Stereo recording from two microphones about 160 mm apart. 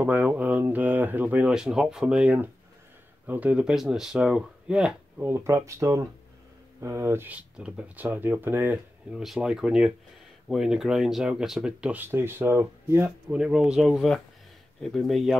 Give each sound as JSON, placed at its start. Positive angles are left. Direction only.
{"t": 0.0, "sound": "speech", "side_deg": -10}
{"t": 5.3, "sound": "speech", "side_deg": -15}